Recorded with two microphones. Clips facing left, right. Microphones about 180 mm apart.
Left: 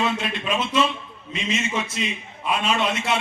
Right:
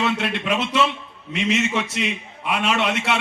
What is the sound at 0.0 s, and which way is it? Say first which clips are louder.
A man's voice: right 2 dB; 70° right (ahead or behind).